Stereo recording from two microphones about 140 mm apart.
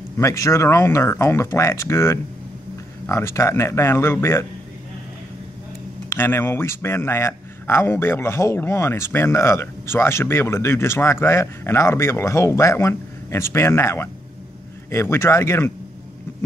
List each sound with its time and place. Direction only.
0.2 s speech: 20° left (ahead or behind)
6.0 s speech: 15° left (ahead or behind)